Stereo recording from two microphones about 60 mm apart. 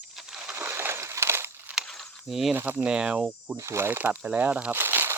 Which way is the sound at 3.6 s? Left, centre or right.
Right.